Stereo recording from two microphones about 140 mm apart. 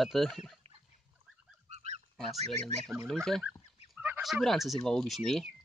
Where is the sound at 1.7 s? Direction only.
50° right (ahead or behind).